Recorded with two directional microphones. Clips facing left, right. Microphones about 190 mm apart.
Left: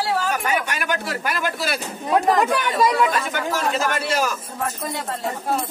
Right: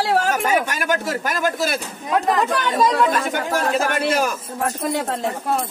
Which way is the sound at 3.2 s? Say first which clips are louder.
Right 2 dB; 50° right (ahead or behind).